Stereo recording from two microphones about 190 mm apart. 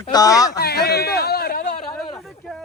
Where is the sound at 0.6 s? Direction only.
55° left (ahead or behind).